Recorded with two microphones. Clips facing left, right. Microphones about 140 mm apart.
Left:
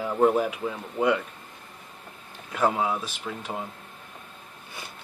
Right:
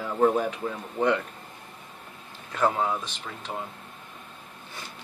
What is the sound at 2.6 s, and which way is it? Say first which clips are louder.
Speech: left 1 dB; 5° left (ahead or behind).